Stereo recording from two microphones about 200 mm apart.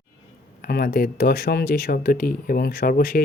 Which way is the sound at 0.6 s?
45° left (ahead or behind).